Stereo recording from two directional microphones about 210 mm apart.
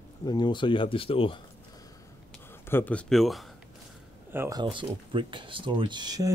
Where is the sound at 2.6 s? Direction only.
10° left (ahead or behind).